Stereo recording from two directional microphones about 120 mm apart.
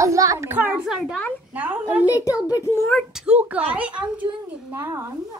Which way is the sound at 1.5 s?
15° right (ahead or behind).